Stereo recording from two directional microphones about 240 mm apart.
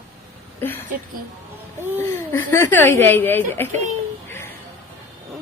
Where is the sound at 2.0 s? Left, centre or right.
Centre.